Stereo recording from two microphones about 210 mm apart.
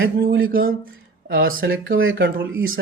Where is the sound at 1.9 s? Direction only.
60° right (ahead or behind).